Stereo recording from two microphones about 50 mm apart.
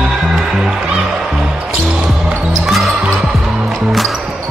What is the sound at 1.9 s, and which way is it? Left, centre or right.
Music, right.